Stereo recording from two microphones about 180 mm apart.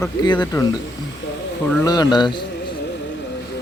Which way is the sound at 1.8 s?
20° left (ahead or behind).